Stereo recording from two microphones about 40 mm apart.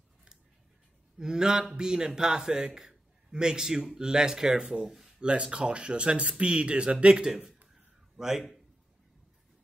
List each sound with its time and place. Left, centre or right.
1.1 s a man's voice: centre
4.8 s speech: centre
5.2 s speech: right
8.2 s a man's voice: centre